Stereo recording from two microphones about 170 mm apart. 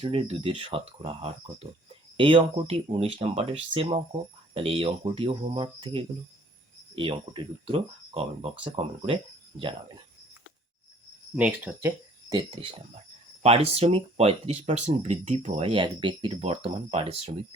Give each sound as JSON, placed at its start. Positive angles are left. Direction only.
{"t": 0.0, "sound": "speech", "side_deg": -35}
{"t": 11.3, "sound": "speech", "side_deg": -10}
{"t": 13.4, "sound": "speech", "side_deg": -35}